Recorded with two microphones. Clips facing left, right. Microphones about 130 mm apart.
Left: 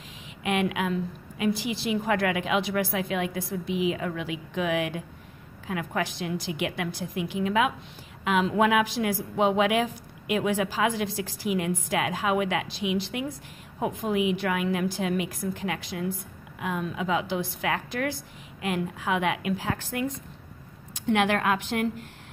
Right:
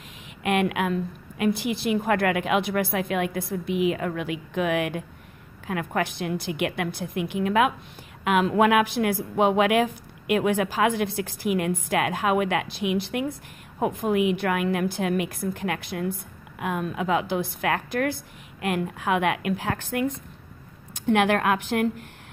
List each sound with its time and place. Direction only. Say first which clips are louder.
0.4 s a woman's voice: right 3 dB; 55° right (ahead or behind)